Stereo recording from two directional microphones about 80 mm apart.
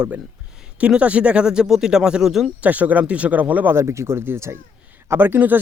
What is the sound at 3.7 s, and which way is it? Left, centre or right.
Speech, right.